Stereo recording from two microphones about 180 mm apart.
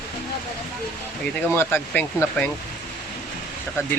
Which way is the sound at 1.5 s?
10° left (ahead or behind).